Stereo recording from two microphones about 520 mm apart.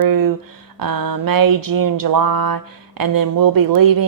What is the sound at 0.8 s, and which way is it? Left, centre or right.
Speech, right.